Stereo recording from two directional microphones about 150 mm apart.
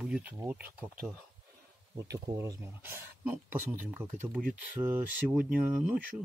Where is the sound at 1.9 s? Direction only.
20° right (ahead or behind).